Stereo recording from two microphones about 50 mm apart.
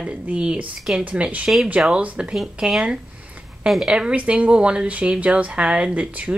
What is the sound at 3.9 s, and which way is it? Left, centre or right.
Speech, centre.